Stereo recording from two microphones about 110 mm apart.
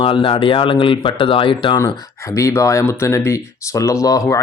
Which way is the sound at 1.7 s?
25° left (ahead or behind).